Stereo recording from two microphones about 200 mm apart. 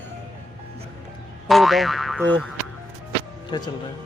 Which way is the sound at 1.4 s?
Centre (ahead or behind).